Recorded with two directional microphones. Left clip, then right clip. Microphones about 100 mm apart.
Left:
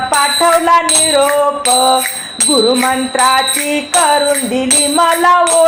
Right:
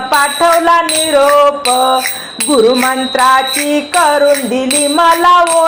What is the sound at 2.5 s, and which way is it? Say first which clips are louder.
Music: right 2 dB; 25° right (ahead or behind).